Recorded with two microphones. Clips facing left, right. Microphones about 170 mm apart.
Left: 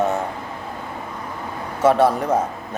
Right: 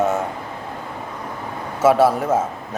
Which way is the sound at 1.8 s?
5° right (ahead or behind).